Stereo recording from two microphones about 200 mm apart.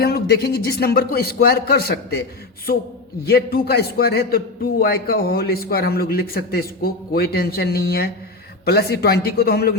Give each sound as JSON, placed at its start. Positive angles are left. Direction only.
{"t": 0.0, "sound": "a man's voice", "side_deg": 55}
{"t": 3.2, "sound": "a man's voice", "side_deg": 50}